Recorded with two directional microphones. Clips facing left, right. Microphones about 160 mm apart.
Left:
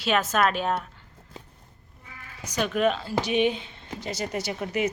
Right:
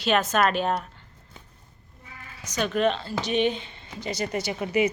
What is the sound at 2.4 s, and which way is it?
A woman's voice, 10° left (ahead or behind).